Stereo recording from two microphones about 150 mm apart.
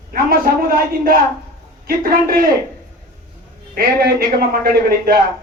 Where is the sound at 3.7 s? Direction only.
75° right (ahead or behind).